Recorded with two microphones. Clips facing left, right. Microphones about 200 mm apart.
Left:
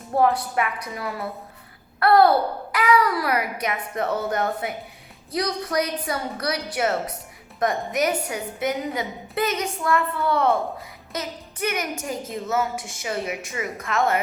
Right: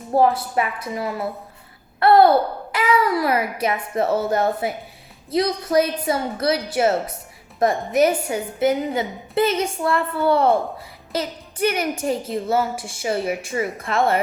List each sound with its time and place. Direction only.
0.1 s a child's voice: 30° right (ahead or behind)